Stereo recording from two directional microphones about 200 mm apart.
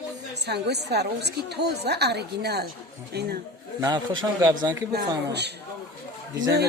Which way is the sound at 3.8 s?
20° right (ahead or behind).